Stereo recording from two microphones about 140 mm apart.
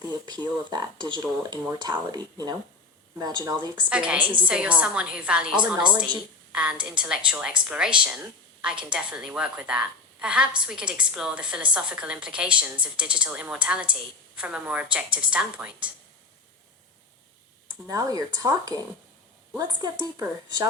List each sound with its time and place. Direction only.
0.7 s speech: 30° right (ahead or behind)
3.8 s a woman's voice: 10° right (ahead or behind)
17.8 s speech: 25° right (ahead or behind)